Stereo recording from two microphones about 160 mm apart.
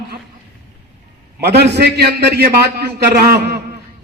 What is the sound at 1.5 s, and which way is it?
A man's voice, 90° right.